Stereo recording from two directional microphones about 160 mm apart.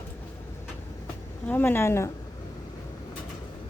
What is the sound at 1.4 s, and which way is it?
Speech, 10° left (ahead or behind).